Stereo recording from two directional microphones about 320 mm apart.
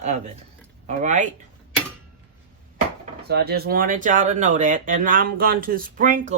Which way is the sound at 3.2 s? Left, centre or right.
Right.